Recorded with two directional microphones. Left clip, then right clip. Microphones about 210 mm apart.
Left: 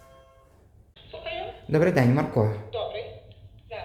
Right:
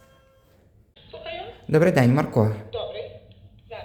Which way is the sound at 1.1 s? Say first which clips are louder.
Left 1 dB; 15° right (ahead or behind).